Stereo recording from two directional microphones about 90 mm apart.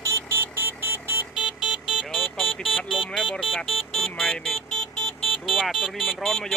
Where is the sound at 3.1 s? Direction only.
5° left (ahead or behind).